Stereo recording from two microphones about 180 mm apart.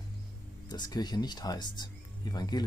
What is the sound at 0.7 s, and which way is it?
Speech, 20° left (ahead or behind).